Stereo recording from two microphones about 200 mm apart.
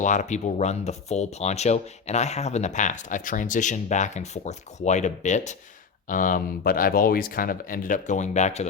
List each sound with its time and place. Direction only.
0.0 s speech: 40° left (ahead or behind)